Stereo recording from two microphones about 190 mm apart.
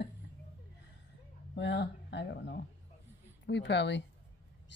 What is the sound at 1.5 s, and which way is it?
Speech, 65° left (ahead or behind).